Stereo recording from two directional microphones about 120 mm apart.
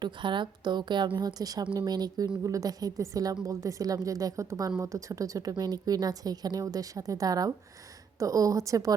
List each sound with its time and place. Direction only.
0.0 s a woman's voice: 40° right (ahead or behind)